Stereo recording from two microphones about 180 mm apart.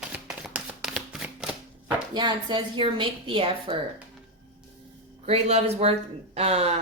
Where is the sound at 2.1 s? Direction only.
25° right (ahead or behind).